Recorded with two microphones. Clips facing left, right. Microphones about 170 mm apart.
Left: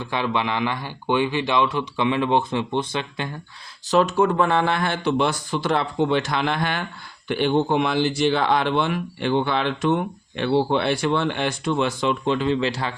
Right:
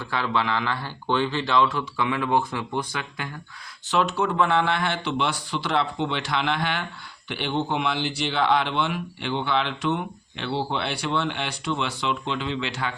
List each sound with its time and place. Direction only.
0.0 s speech: 20° left (ahead or behind)
3.8 s speech: 40° left (ahead or behind)